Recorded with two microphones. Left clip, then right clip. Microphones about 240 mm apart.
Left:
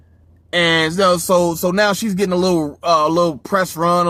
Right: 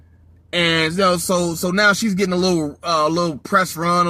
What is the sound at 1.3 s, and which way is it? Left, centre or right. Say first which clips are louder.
Speech: left 5 dB; left.